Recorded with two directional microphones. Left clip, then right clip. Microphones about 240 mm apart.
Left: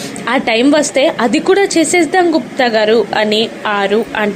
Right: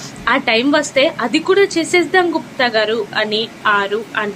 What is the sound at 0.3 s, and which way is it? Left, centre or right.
A woman's voice, centre.